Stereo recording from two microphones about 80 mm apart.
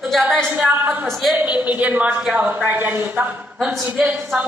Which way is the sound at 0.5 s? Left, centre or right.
Centre.